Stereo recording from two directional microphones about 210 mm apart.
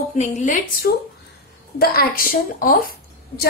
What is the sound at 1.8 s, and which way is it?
A woman's voice, 45° left (ahead or behind).